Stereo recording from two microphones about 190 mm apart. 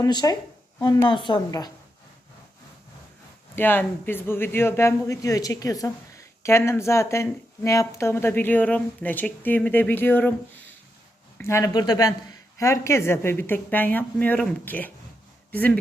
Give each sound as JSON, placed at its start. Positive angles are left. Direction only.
{"t": 0.0, "sound": "a woman's voice", "side_deg": 20}
{"t": 3.5, "sound": "speech", "side_deg": 10}
{"t": 11.3, "sound": "speech", "side_deg": 15}